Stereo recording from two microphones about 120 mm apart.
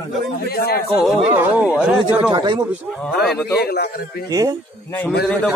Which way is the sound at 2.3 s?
40° right (ahead or behind).